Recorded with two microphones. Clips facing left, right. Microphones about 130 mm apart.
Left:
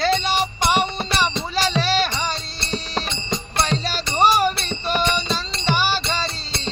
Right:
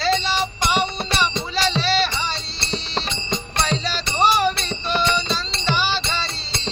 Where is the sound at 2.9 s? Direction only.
5° left (ahead or behind).